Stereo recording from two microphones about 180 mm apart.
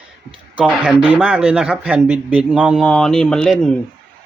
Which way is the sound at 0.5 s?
5° right (ahead or behind).